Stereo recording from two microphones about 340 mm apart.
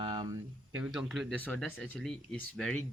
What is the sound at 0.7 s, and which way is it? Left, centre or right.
Speech, centre.